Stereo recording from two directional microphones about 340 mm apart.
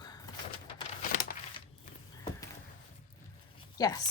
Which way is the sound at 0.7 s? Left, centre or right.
Left.